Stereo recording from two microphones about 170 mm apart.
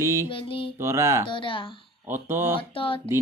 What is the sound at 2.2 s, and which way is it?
Speech, 15° right (ahead or behind).